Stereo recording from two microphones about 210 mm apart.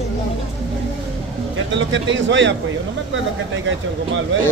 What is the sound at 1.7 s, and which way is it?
Speech, 60° right (ahead or behind).